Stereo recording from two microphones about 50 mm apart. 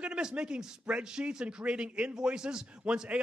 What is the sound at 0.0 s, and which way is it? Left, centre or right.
A man's voice, centre.